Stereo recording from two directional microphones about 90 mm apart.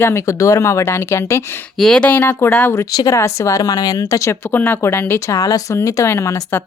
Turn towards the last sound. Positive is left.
turn(degrees=30)  # may be behind; listen again after turning